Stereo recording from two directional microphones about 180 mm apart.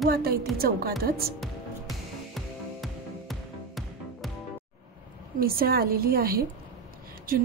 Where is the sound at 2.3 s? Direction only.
Centre (ahead or behind).